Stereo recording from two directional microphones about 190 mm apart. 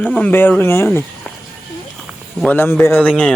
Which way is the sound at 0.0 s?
5° left (ahead or behind).